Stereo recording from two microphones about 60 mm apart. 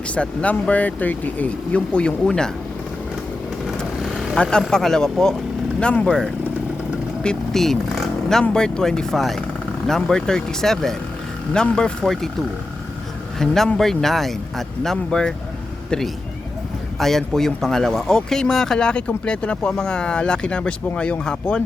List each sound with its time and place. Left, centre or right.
0.1 s speech: left
4.4 s speech: centre
7.2 s speech: centre
13.4 s speech: centre
17.0 s speech: centre